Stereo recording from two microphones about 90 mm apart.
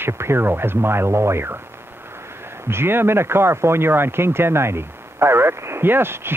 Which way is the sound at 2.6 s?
25° right (ahead or behind).